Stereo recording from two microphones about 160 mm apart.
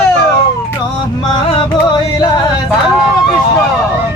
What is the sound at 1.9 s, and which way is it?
Music, 25° left (ahead or behind).